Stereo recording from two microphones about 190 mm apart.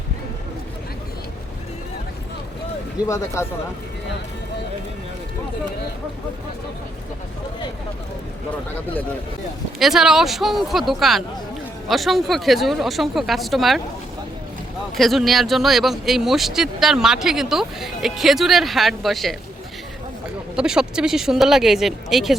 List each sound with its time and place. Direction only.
9.7 s speech: centre (ahead or behind)
14.9 s speech: centre (ahead or behind)
20.6 s speech: 5° right (ahead or behind)